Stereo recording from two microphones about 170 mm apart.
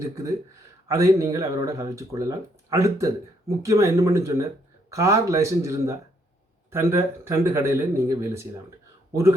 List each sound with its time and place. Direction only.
0.0 s speech: 20° right (ahead or behind)